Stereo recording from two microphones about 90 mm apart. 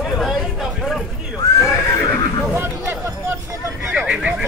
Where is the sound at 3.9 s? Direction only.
15° right (ahead or behind).